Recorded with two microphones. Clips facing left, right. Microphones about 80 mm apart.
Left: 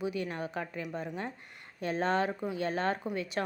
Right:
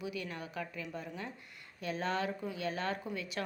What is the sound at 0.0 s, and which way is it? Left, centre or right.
A woman's voice, left.